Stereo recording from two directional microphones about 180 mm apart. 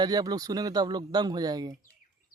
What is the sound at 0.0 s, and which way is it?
Speech, 20° right (ahead or behind).